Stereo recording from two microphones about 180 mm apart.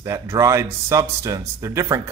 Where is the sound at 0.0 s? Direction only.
15° right (ahead or behind).